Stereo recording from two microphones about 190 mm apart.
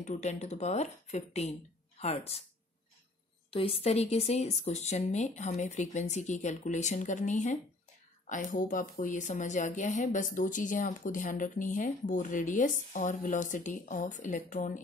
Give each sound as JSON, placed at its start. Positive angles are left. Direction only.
{"t": 0.0, "sound": "speech", "side_deg": 40}
{"t": 3.4, "sound": "speech", "side_deg": 30}